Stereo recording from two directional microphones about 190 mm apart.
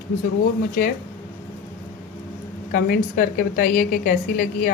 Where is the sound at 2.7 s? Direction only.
50° left (ahead or behind).